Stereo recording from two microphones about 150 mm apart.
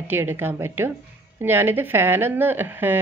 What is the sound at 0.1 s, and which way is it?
Speech, 15° right (ahead or behind).